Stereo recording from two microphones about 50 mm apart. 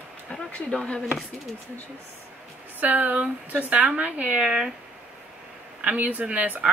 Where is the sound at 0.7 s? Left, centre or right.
Centre.